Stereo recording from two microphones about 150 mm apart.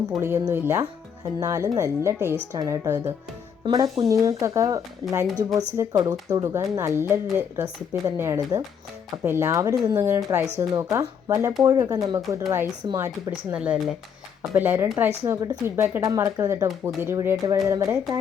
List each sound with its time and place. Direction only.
0.2 s speech: 15° right (ahead or behind)
4.1 s speech: 25° right (ahead or behind)
13.5 s speech: 10° right (ahead or behind)